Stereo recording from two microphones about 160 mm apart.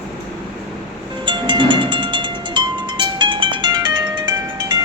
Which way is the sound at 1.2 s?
30° right (ahead or behind).